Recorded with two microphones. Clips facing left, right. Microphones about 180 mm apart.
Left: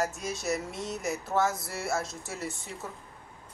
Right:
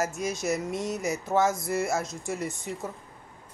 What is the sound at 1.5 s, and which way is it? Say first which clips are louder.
Speech: right 8 dB; centre (ahead or behind).